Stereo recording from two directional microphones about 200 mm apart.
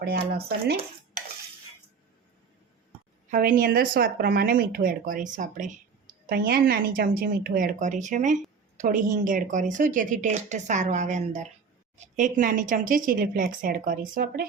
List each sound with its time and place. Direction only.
0.0 s speech: 50° right (ahead or behind)
3.2 s a woman's voice: 40° right (ahead or behind)